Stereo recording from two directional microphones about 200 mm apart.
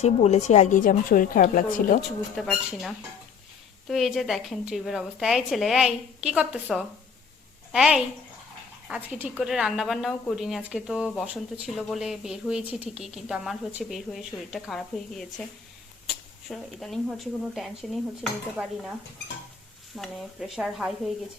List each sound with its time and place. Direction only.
0.0 s a woman's voice: 35° left (ahead or behind)
2.3 s a woman's voice: centre (ahead or behind)
20.0 s speech: centre (ahead or behind)